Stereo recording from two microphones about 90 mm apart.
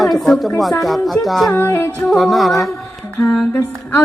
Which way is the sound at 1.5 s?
30° left (ahead or behind).